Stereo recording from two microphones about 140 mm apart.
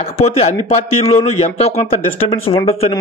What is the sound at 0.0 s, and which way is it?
Speech, 50° left (ahead or behind).